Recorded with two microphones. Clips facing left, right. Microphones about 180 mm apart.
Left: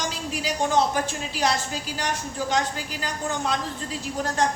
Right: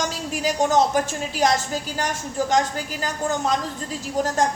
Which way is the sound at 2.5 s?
45° right (ahead or behind).